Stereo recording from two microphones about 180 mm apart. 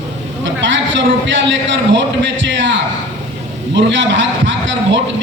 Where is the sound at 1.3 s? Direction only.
90° right.